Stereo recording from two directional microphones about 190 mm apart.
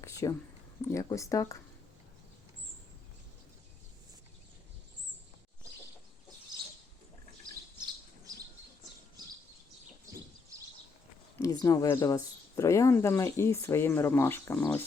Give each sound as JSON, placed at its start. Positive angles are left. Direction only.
{"t": 0.0, "sound": "a sound", "side_deg": 15}
{"t": 0.8, "sound": "speech", "side_deg": 15}
{"t": 11.3, "sound": "speech", "side_deg": 15}